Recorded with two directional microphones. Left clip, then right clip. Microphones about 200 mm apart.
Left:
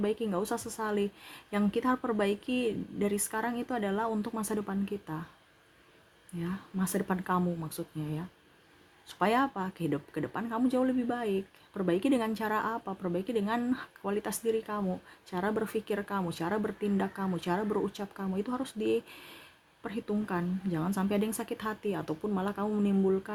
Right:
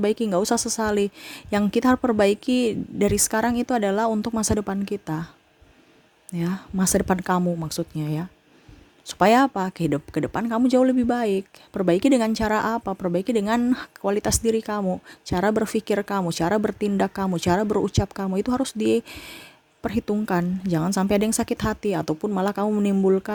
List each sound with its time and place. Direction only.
0.0 s speech: 55° right (ahead or behind)
0.6 s speech: 60° right (ahead or behind); by 5.2 s 45° right (ahead or behind)
6.4 s speech: 50° right (ahead or behind)